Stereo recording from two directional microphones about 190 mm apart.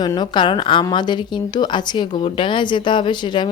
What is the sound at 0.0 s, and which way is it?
A woman's voice, 20° left (ahead or behind).